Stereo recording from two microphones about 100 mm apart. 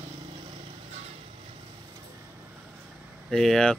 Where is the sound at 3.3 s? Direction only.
5° left (ahead or behind).